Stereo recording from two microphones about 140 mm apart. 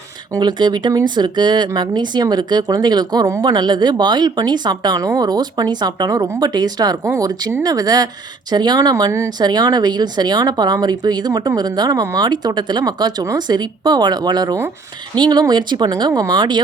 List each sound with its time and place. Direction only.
0.3 s speech: 30° right (ahead or behind)